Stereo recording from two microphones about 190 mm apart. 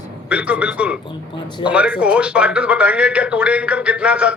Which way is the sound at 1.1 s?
25° left (ahead or behind).